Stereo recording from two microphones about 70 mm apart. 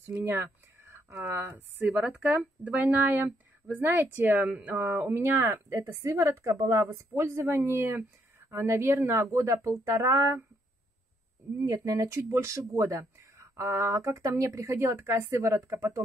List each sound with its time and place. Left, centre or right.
0.0 s speech: right
1.5 s speech: right
11.6 s speech: right